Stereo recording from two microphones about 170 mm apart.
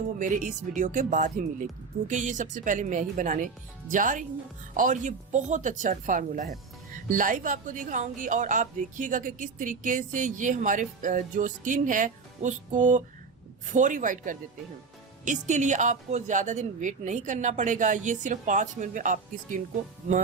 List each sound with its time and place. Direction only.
0.2 s a woman's voice: 50° right (ahead or behind)